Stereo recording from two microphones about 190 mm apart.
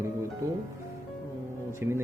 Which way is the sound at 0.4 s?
15° right (ahead or behind).